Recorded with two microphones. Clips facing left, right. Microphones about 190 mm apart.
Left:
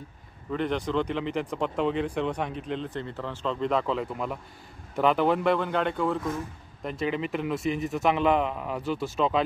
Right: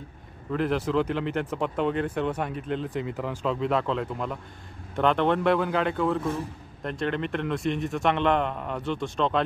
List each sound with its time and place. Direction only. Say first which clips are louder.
0.5 s speech: right 2 dB; 5° right (ahead or behind)